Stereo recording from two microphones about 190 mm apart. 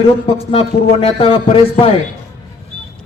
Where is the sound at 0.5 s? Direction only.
30° left (ahead or behind).